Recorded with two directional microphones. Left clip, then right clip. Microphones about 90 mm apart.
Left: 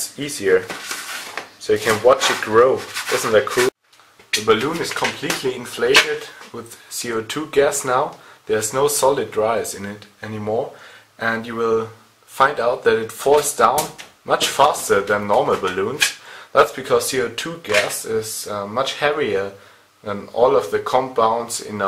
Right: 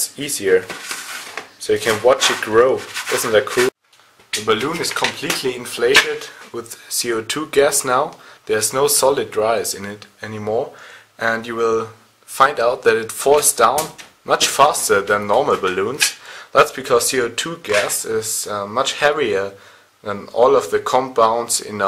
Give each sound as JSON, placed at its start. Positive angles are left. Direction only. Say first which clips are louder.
{"t": 0.2, "sound": "speech", "louder": "right 1 dB", "side_deg": -20}
{"t": 0.6, "sound": "a sound", "louder": "right 1 dB", "side_deg": -5}
{"t": 1.7, "sound": "speech", "louder": "even", "side_deg": -25}
{"t": 2.7, "sound": "speech", "louder": "right 1 dB", "side_deg": 0}
{"t": 3.2, "sound": "speech", "louder": "even", "side_deg": -20}
{"t": 3.4, "sound": "speech", "louder": "right 1 dB", "side_deg": 0}
{"t": 4.6, "sound": "speech", "louder": "right 1 dB", "side_deg": -30}
{"t": 5.4, "sound": "speech", "louder": "right 3 dB", "side_deg": -20}
{"t": 6.5, "sound": "speech", "louder": "right 10 dB", "side_deg": -30}